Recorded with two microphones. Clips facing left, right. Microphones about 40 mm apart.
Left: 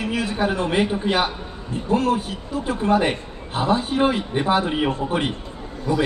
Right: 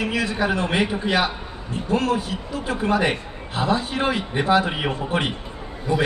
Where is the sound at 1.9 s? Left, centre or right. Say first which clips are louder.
Left 1 dB; right.